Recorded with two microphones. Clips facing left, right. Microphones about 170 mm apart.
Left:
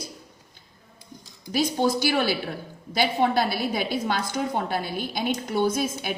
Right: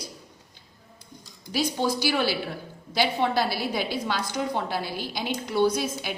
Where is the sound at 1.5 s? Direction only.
50° left (ahead or behind).